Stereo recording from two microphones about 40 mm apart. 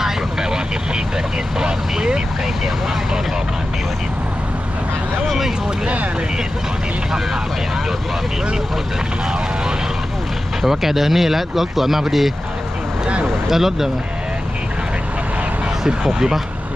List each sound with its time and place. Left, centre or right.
0.0 s vehicle: centre
5.2 s speech: centre
10.6 s speech: centre
16.0 s speech: centre